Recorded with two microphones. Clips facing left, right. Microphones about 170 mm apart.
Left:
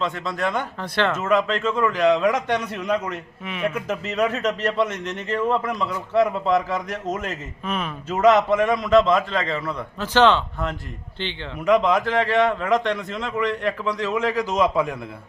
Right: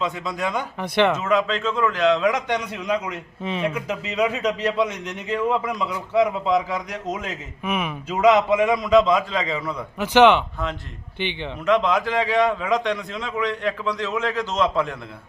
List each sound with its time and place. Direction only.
0.0 s a man's voice: centre (ahead or behind)
0.8 s speech: 15° right (ahead or behind)
1.5 s a man's voice: 5° left (ahead or behind)
7.6 s speech: 10° right (ahead or behind)
8.1 s a man's voice: centre (ahead or behind)
10.0 s speech: 15° right (ahead or behind)
11.6 s a man's voice: 5° left (ahead or behind)